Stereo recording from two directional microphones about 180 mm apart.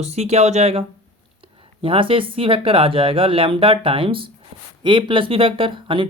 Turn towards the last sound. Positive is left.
turn(degrees=-30)  # may be behind; listen again after turning